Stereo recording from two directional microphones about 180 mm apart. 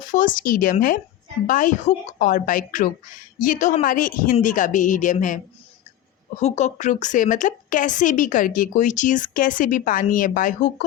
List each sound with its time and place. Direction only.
0.1 s a woman's voice: 45° left (ahead or behind)
6.4 s a woman's voice: 40° left (ahead or behind)